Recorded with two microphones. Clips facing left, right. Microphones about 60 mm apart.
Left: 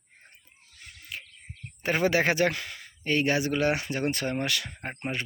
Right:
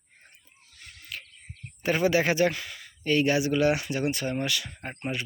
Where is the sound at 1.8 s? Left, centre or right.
Left.